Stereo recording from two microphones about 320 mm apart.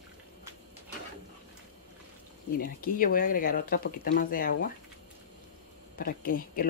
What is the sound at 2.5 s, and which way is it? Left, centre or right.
Speech, left.